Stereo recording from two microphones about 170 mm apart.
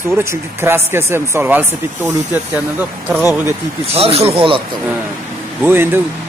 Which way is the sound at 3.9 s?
35° right (ahead or behind).